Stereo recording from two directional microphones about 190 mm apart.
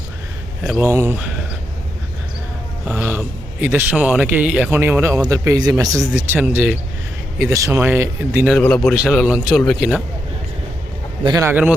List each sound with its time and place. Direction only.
0.6 s a man's voice: 5° right (ahead or behind)
2.8 s a man's voice: 10° right (ahead or behind)
8.5 s a man's voice: 5° left (ahead or behind)
11.2 s a man's voice: 20° right (ahead or behind)